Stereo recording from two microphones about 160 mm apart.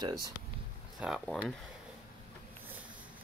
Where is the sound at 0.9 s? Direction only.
5° right (ahead or behind).